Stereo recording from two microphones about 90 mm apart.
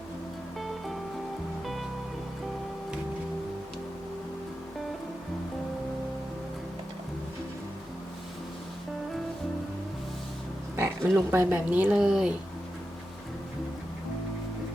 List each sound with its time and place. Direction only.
10.8 s speech: 30° right (ahead or behind); by 12.3 s 10° right (ahead or behind)